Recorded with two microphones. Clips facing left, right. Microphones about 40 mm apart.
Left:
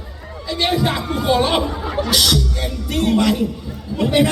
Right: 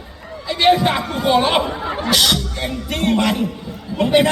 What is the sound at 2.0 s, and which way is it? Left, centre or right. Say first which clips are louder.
Music: even; right.